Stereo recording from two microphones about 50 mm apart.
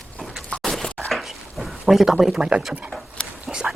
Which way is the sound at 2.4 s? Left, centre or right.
Right.